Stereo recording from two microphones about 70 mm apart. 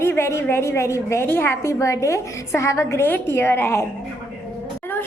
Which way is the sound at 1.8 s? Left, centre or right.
Left.